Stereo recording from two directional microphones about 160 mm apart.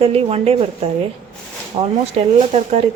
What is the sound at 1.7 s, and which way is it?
A man's voice, 35° right (ahead or behind).